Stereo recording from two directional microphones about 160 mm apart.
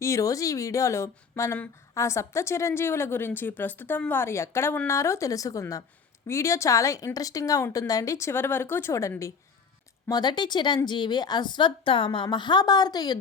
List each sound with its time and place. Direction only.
0.0 s a woman's voice: 20° left (ahead or behind)